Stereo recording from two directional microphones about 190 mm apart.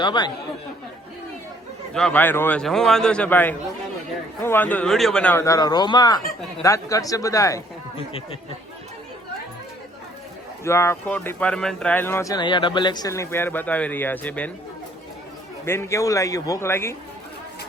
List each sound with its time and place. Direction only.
0.0 s speech: 25° left (ahead or behind)
1.9 s a man's voice: 5° left (ahead or behind)
7.9 s speech: 30° left (ahead or behind)
10.6 s speech: 15° left (ahead or behind)
15.6 s speech: 15° left (ahead or behind)